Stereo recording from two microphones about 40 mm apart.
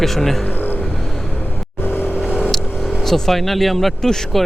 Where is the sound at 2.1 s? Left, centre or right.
Right.